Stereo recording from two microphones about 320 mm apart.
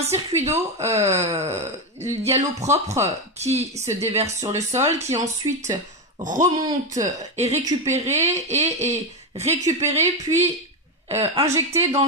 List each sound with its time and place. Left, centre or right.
0.0 s a woman's voice: centre